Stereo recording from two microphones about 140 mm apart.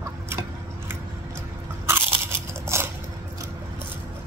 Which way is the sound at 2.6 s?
20° right (ahead or behind).